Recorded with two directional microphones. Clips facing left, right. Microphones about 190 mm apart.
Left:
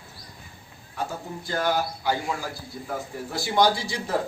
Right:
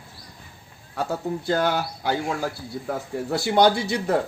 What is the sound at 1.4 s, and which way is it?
Speech, 70° right (ahead or behind).